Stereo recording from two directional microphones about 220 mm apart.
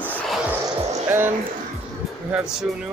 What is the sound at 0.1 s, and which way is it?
Music, 5° left (ahead or behind).